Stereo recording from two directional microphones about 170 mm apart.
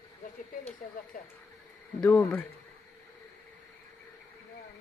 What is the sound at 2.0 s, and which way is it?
Speech, 10° left (ahead or behind).